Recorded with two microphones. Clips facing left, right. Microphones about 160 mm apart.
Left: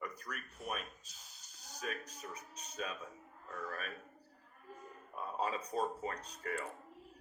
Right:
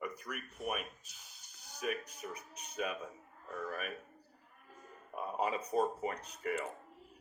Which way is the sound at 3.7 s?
15° right (ahead or behind).